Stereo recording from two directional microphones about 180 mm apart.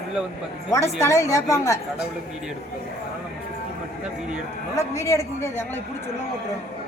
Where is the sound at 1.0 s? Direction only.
15° left (ahead or behind).